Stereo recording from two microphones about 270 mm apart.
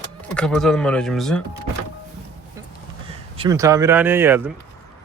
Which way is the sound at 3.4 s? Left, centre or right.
Centre.